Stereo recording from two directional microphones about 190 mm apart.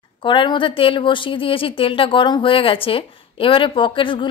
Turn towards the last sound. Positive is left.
turn(degrees=25)  # may be behind; listen again after turning